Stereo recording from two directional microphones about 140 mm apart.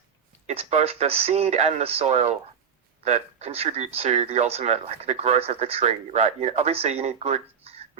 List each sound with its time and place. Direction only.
0.4 s speech: 50° right (ahead or behind)